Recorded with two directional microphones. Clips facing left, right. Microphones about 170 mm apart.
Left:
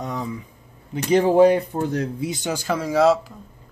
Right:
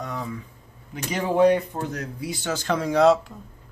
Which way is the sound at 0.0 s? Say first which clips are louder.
Left 3 dB; 20° left (ahead or behind).